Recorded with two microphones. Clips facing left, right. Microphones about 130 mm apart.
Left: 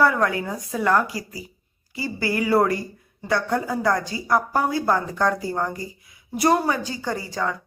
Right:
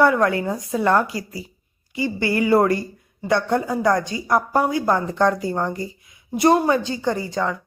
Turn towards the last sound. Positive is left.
turn(degrees=-20)  # may be behind; listen again after turning